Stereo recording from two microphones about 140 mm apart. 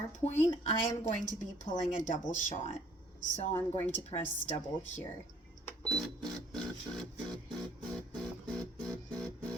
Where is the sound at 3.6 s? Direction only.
15° left (ahead or behind).